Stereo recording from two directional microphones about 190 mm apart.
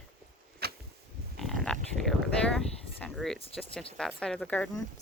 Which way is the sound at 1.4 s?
Centre (ahead or behind).